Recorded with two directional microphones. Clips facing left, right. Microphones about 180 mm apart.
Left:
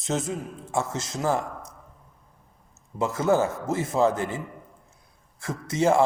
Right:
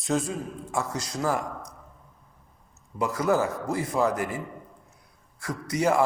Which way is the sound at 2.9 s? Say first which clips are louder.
Left 2 dB; 25° left (ahead or behind).